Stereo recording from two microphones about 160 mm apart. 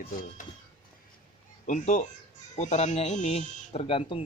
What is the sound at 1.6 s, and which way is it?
Speech, 50° left (ahead or behind).